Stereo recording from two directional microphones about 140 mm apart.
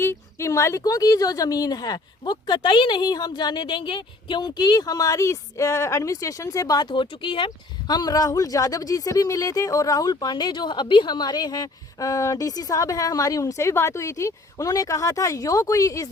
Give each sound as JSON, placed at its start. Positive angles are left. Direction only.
{"t": 0.0, "sound": "speech", "side_deg": 20}